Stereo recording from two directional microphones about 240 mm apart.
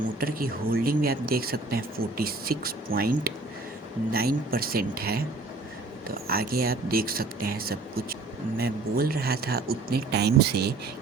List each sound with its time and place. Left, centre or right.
0.2 s speech: right